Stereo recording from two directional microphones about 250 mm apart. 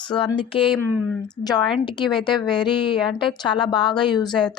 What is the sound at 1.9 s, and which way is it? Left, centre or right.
Speech, centre.